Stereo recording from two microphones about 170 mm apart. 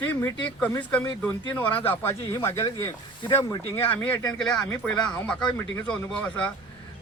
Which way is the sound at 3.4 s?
30° left (ahead or behind).